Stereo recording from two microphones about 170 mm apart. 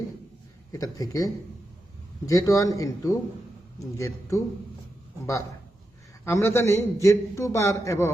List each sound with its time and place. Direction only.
0.7 s a man's voice: 20° left (ahead or behind)
6.2 s a man's voice: 15° left (ahead or behind)